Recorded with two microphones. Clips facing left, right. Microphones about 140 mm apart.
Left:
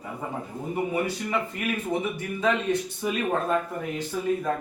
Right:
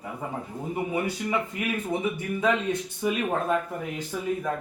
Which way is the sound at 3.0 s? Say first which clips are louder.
Right 4 dB; 5° right (ahead or behind).